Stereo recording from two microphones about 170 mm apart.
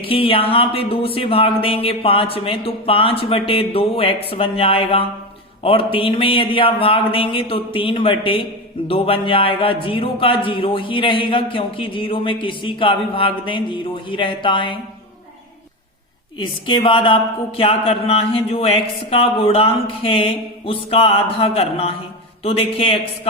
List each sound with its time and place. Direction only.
0.0 s speech: 30° left (ahead or behind)
16.4 s speech: 30° left (ahead or behind)